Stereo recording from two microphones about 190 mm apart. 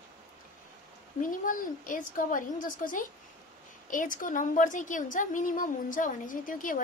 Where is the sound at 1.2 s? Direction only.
45° left (ahead or behind).